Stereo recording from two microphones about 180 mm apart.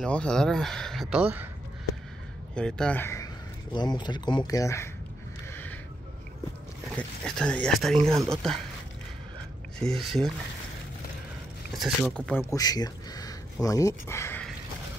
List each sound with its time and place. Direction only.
0.0 s speech: 5° left (ahead or behind)
2.5 s speech: 5° left (ahead or behind)
3.7 s speech: 25° left (ahead or behind)
5.5 s a sound: 10° left (ahead or behind)
7.0 s speech: 5° left (ahead or behind)
9.8 s speech: centre (ahead or behind)
11.8 s speech: 5° left (ahead or behind)
12.5 s speech: 20° left (ahead or behind)